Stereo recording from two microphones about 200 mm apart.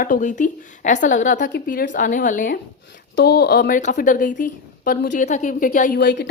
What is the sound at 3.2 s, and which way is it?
A woman's voice, 55° left (ahead or behind).